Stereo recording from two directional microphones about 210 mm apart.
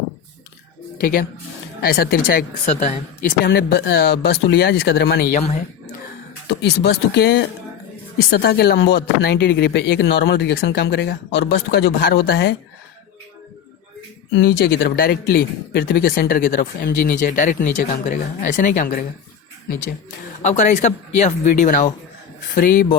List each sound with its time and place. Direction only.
1.0 s speech: 45° left (ahead or behind)
2.6 s speech: 30° left (ahead or behind)
3.4 s speech: 50° left (ahead or behind)
5.4 s speech: 30° left (ahead or behind)
6.5 s speech: 55° left (ahead or behind)
14.3 s speech: 50° left (ahead or behind)
20.4 s speech: 35° left (ahead or behind)